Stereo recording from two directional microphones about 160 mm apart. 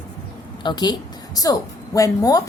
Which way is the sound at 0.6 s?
25° left (ahead or behind).